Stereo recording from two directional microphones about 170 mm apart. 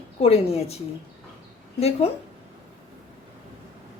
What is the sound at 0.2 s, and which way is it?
Speech, 35° left (ahead or behind).